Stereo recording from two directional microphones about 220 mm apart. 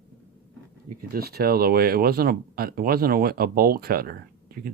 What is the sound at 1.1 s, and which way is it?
Speech, 45° right (ahead or behind).